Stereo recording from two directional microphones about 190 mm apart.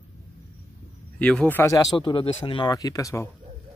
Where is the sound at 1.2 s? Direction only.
5° left (ahead or behind).